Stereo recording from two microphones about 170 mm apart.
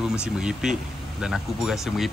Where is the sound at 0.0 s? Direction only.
5° right (ahead or behind).